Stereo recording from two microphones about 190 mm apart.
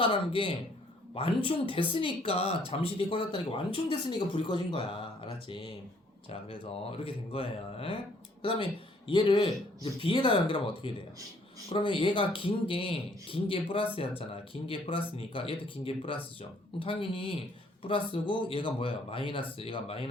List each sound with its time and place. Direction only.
0.0 s speech: 30° left (ahead or behind)
1.7 s speech: 25° left (ahead or behind)